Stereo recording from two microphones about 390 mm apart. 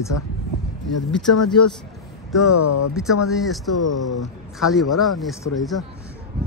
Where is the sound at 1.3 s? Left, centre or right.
Left.